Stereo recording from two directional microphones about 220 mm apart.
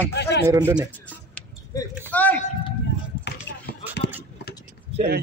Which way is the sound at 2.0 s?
5° left (ahead or behind).